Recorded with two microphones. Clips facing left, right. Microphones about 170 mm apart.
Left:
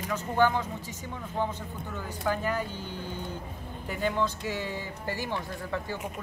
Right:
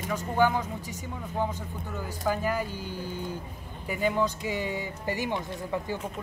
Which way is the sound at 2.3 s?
10° right (ahead or behind).